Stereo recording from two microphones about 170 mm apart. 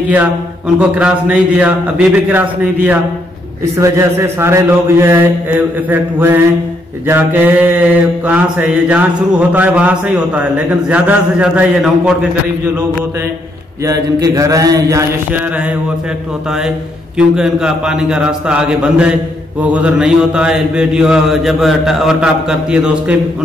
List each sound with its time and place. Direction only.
0.7 s a man's voice: 5° right (ahead or behind)
10.9 s mantra: 5° right (ahead or behind)
13.8 s a sound: 20° right (ahead or behind)
17.4 s mantra: 5° right (ahead or behind)